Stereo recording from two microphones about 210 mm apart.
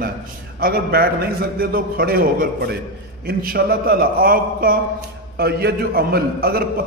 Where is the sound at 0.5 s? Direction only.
45° right (ahead or behind).